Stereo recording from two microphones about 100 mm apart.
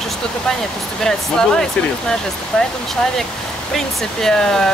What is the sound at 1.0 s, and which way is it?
Speech, 5° left (ahead or behind).